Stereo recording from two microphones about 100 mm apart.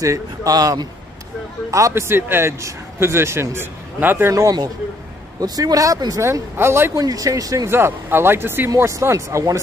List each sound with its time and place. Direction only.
0.0 s speech: 35° right (ahead or behind)
4.3 s speech: 35° right (ahead or behind)
6.5 s speech: 25° right (ahead or behind)
7.0 s speech: 35° right (ahead or behind)
7.7 s speech: 25° right (ahead or behind)